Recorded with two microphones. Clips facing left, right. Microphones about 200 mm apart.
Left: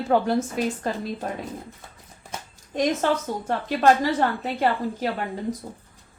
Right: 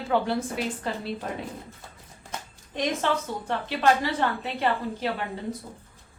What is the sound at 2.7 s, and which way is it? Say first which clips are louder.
A woman's voice: left 4 dB; 45° left (ahead or behind).